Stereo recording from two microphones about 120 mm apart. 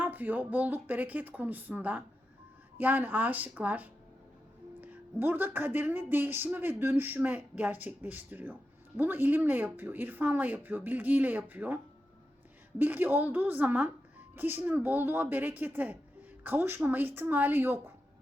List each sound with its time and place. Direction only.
0.0 s speech: 15° right (ahead or behind)
12.8 s speech: 15° right (ahead or behind)